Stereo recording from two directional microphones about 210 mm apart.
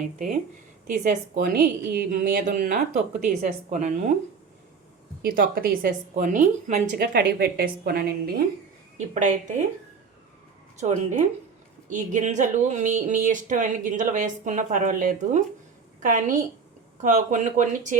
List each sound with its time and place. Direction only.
0.9 s speech: 40° right (ahead or behind)
5.2 s a woman's voice: 45° right (ahead or behind)
9.0 s speech: 35° right (ahead or behind)
10.8 s speech: 35° right (ahead or behind)